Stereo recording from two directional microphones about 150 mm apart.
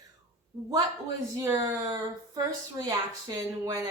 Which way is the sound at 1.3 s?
20° right (ahead or behind).